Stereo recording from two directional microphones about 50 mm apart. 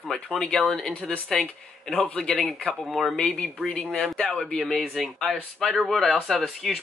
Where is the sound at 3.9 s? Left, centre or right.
Centre.